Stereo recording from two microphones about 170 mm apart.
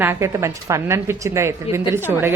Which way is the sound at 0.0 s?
15° right (ahead or behind).